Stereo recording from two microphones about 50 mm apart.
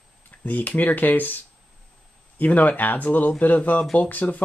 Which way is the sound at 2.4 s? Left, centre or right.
Left.